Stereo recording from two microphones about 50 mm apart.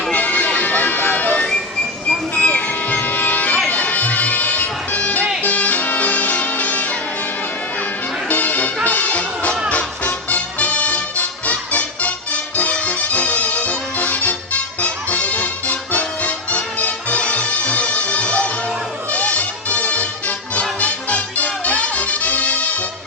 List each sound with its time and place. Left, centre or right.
0.1 s music: left
3.7 s bagpipes: left
5.4 s music: left
8.3 s music: left